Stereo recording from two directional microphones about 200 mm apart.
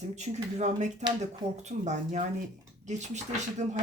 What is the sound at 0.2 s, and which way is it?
Speech, 35° right (ahead or behind).